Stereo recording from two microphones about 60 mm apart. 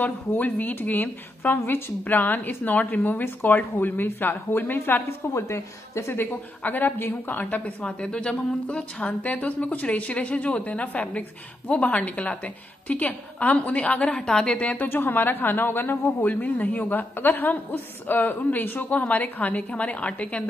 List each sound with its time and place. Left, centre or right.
0.0 s a woman's voice: left
5.3 s a woman's voice: left
6.1 s a woman's voice: left
14.9 s a woman's voice: left